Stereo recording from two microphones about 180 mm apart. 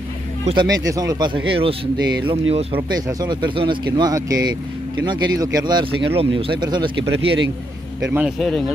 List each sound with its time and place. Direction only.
0.5 s speech: 25° right (ahead or behind)
8.1 s speech: 5° right (ahead or behind)